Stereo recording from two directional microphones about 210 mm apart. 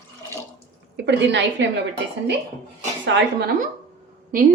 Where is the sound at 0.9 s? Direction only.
55° right (ahead or behind).